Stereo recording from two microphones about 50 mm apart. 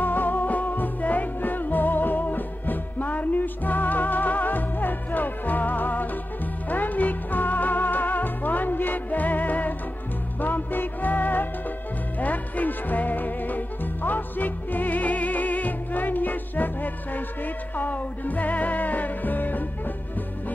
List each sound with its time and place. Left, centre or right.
0.0 s music: left